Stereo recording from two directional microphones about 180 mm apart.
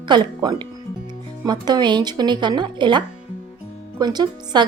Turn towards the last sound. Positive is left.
turn(degrees=-25)  # may be behind; listen again after turning